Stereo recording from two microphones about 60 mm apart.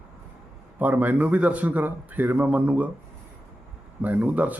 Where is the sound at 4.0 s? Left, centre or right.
Right.